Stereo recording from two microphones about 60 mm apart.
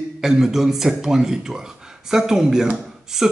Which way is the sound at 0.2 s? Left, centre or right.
Centre.